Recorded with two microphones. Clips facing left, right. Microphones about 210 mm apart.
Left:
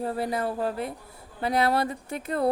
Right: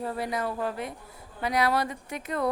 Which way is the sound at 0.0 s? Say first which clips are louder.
Left 3 dB; 30° left (ahead or behind).